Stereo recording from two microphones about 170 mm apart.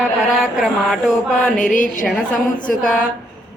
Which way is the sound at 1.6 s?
50° left (ahead or behind).